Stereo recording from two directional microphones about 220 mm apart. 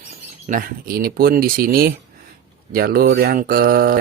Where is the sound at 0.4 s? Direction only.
40° right (ahead or behind).